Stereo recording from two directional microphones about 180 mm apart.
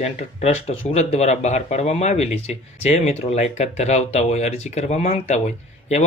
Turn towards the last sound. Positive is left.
turn(degrees=40)  # may be behind; listen again after turning